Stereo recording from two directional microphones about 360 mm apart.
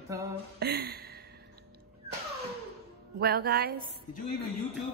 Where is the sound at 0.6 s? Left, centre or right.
Right.